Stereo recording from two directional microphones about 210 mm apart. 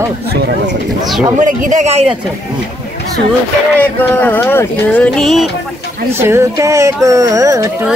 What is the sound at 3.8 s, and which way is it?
Speech, 10° left (ahead or behind).